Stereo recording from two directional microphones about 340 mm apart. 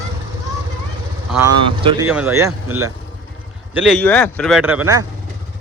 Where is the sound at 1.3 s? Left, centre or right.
Centre.